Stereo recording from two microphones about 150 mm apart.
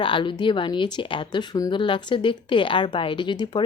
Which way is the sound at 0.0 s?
35° left (ahead or behind).